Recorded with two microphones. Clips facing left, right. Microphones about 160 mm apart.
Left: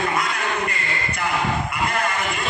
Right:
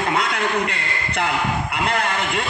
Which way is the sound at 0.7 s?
75° right (ahead or behind).